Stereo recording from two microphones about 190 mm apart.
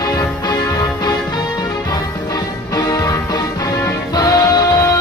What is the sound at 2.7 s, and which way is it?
Music, 20° left (ahead or behind).